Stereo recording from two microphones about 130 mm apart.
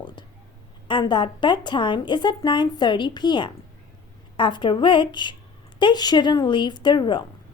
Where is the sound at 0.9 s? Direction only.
35° left (ahead or behind).